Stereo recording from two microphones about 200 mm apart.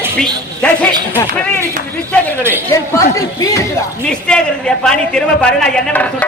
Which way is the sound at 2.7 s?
15° left (ahead or behind).